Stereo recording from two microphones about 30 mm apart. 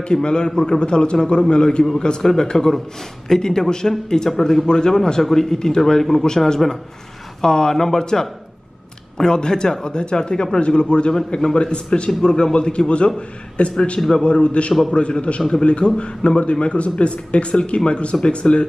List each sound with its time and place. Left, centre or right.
0.0 s a man's voice: left
5.2 s a man's voice: centre
7.7 s a man's voice: centre; by 14.7 s left
14.7 s a man's voice: centre
15.0 s speech: left